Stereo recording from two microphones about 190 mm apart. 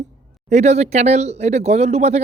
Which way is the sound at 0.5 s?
35° right (ahead or behind).